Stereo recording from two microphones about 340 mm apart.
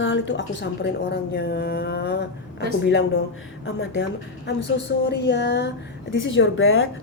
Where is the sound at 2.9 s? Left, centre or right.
Left.